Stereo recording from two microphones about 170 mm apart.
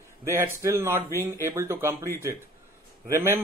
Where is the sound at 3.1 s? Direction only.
15° right (ahead or behind).